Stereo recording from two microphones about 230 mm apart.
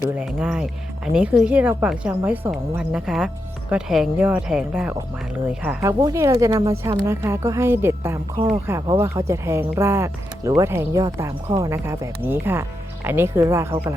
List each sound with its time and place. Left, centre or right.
0.0 s a woman's voice: centre